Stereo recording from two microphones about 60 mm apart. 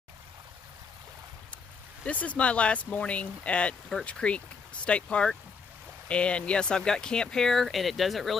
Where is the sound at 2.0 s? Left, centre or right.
Left.